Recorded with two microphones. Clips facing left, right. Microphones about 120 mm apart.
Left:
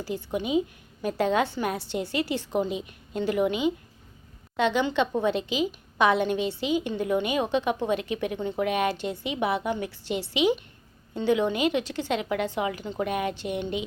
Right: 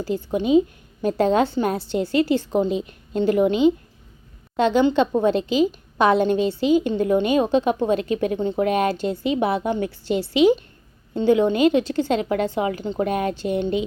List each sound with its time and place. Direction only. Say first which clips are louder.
0.1 s a woman's voice: right 8 dB; 30° right (ahead or behind)